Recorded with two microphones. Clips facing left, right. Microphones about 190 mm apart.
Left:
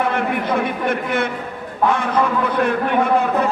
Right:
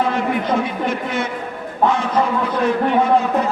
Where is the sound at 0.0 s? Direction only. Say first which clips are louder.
Right 1 dB; 60° left (ahead or behind).